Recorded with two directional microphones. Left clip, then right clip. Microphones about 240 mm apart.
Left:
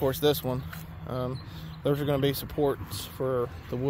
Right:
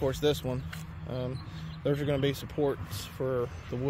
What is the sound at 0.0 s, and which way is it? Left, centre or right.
Speech, left.